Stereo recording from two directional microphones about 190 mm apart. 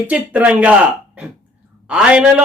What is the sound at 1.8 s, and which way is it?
Speech, 5° right (ahead or behind).